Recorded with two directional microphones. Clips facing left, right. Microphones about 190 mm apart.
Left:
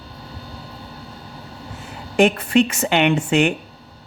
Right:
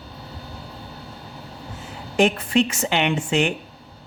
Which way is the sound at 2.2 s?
60° left (ahead or behind).